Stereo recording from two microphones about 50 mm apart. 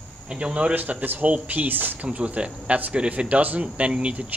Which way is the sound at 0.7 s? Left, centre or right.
Right.